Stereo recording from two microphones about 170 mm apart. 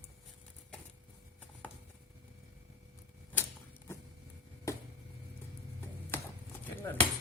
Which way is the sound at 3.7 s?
15° left (ahead or behind).